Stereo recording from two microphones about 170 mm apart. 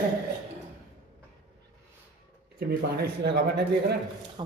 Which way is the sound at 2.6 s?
65° right (ahead or behind).